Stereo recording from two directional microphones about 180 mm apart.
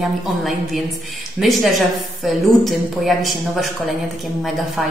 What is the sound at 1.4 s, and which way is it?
A woman's voice, centre (ahead or behind).